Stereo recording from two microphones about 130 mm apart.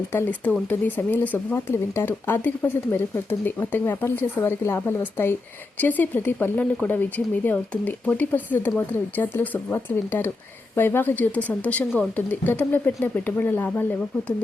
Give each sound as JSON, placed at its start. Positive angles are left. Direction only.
{"t": 0.1, "sound": "speech", "side_deg": 15}